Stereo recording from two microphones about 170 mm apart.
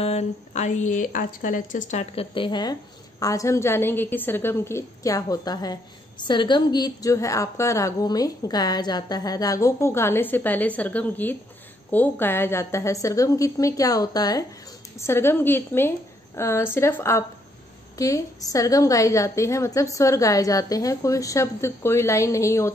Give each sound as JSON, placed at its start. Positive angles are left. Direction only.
{"t": 0.0, "sound": "a woman's voice", "side_deg": 40}